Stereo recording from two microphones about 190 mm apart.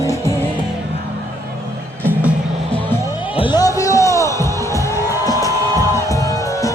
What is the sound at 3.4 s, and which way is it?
Music, 25° left (ahead or behind).